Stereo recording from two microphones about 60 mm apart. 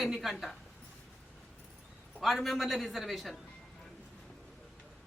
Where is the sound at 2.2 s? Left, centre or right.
Centre.